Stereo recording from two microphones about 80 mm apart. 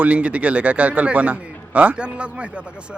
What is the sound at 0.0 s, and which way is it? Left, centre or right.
A man's voice, centre.